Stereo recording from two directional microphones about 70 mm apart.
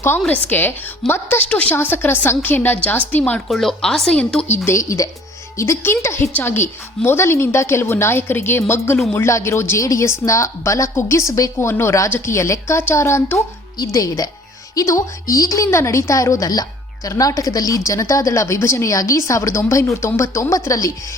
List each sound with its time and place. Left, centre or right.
0.3 s a woman's voice: left
1.5 s a woman's voice: centre
1.7 s a woman's voice: left
3.5 s speech: centre
4.6 s a woman's voice: left
11.6 s a woman's voice: left
13.8 s a woman's voice: left